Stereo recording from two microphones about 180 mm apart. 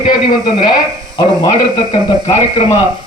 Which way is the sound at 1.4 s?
35° left (ahead or behind).